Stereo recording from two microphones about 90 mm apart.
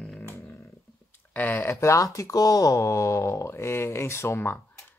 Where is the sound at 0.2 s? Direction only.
30° left (ahead or behind).